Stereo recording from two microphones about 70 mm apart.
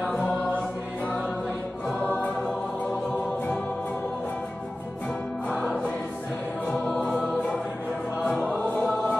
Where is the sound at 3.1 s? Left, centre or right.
Left.